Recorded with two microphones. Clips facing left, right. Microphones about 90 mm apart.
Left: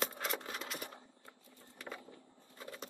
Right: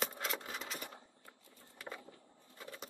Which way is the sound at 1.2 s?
30° left (ahead or behind).